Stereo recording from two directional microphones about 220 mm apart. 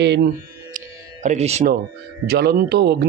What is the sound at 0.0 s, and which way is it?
Speech, 50° right (ahead or behind).